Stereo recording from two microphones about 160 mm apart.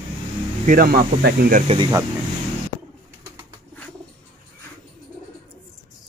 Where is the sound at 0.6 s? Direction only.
65° right (ahead or behind).